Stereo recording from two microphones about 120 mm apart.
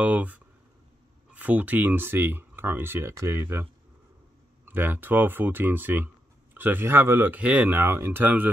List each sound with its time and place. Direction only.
0.0 s speech: 15° right (ahead or behind)
4.6 s speech: 15° right (ahead or behind)